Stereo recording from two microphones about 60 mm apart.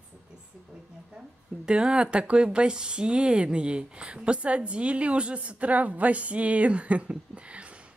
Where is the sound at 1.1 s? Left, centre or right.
Centre.